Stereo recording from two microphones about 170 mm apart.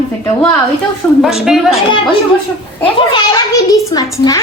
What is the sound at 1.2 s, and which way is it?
Speech, centre (ahead or behind).